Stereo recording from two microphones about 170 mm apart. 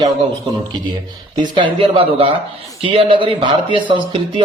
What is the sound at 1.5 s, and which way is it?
Speech, 30° right (ahead or behind).